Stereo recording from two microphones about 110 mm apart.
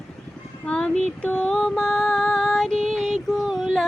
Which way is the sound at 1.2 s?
10° left (ahead or behind).